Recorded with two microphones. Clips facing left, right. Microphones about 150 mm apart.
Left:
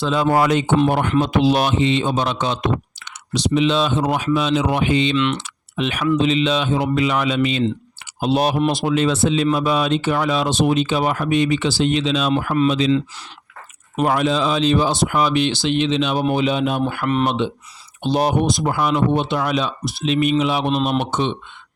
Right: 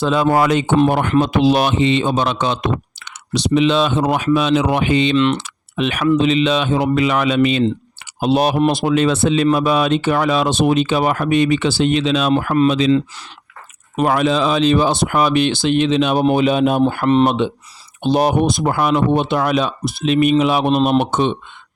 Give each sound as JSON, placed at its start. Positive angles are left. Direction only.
{"t": 0.0, "sound": "speech", "side_deg": -65}
{"t": 1.2, "sound": "speech", "side_deg": -70}
{"t": 5.1, "sound": "speech", "side_deg": -35}
{"t": 5.4, "sound": "typing", "side_deg": -60}
{"t": 6.1, "sound": "speech", "side_deg": -65}
{"t": 13.9, "sound": "speech", "side_deg": -80}